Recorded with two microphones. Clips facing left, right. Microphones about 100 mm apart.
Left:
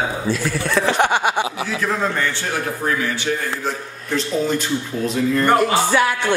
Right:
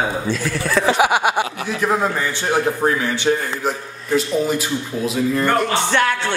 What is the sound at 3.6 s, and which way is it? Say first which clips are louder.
A woman's voice: right 2 dB; 10° right (ahead or behind).